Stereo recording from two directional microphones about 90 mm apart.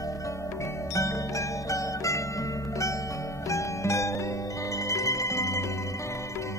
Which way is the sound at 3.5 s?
35° left (ahead or behind).